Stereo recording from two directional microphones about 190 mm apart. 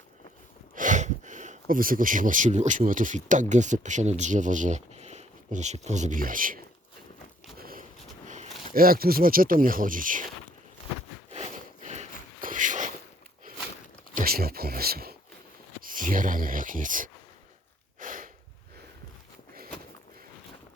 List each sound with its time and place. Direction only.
0.8 s speech: 40° right (ahead or behind)
7.6 s scrape: 50° right (ahead or behind)
8.3 s speech: 45° right (ahead or behind)
11.3 s a sound: 35° right (ahead or behind)
14.2 s speech: 55° right (ahead or behind)
18.0 s a sound: 45° right (ahead or behind)